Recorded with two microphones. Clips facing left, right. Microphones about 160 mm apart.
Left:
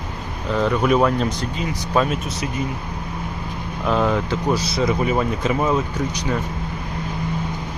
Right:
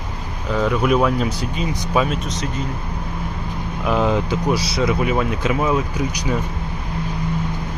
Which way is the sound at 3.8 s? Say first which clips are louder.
Right 1 dB; 10° right (ahead or behind).